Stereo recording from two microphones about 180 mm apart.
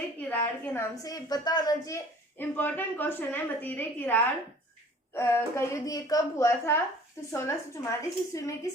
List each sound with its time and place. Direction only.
0.2 s a woman's voice: 10° left (ahead or behind)